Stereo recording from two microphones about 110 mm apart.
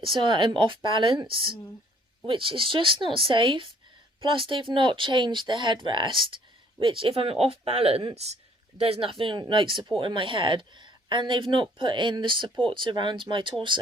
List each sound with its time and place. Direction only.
0.0 s speech: 50° right (ahead or behind)